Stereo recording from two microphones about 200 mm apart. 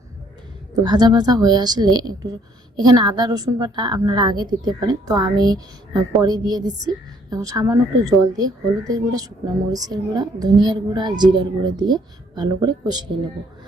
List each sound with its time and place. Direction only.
0.9 s a woman's voice: 20° right (ahead or behind)